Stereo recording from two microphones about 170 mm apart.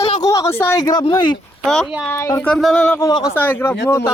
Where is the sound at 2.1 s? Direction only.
20° left (ahead or behind).